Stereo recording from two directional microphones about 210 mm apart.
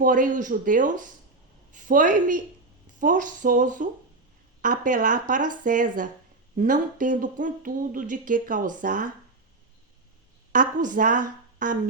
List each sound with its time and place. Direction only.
0.0 s speech: 40° right (ahead or behind)
10.5 s a woman's voice: 40° right (ahead or behind)